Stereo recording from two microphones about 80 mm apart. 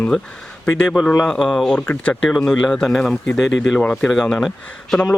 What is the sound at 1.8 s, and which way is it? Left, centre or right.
Speech, left.